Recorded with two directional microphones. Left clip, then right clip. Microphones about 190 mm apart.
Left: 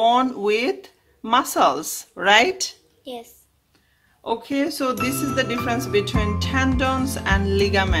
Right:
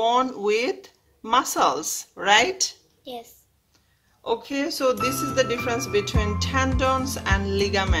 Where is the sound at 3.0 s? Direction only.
Centre (ahead or behind).